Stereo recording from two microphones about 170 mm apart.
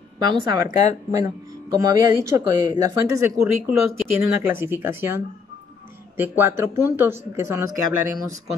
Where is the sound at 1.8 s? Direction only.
20° right (ahead or behind).